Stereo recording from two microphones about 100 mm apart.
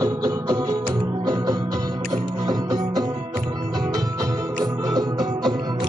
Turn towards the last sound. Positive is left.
turn(degrees=-40)  # may be behind; listen again after turning